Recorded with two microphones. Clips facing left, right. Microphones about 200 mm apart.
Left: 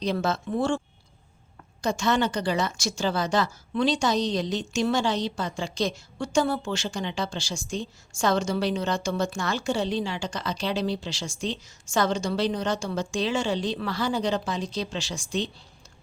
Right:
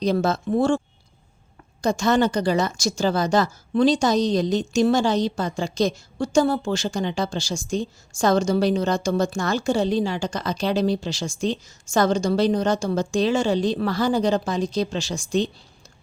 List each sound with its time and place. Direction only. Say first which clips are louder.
0.0 s speech: right 5 dB; 40° right (ahead or behind)
1.8 s a woman's voice: right 5 dB; 40° right (ahead or behind)